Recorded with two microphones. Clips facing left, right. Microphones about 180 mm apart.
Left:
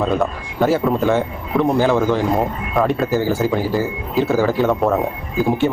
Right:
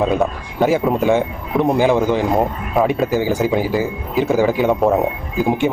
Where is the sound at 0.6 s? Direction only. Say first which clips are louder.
Right 1 dB; 15° right (ahead or behind).